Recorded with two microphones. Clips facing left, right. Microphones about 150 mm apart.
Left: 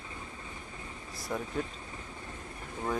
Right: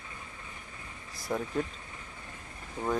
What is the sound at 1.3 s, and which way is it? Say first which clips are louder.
Speech: right 3 dB; 5° right (ahead or behind).